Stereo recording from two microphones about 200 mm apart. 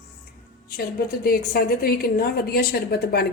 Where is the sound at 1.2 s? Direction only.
45° left (ahead or behind).